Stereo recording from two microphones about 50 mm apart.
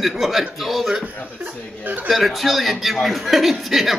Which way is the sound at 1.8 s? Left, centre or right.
Right.